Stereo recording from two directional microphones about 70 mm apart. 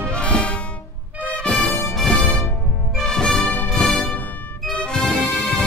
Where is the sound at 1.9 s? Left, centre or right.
Centre.